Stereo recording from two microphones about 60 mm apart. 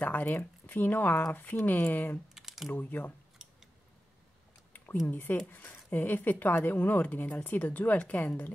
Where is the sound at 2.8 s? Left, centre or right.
Left.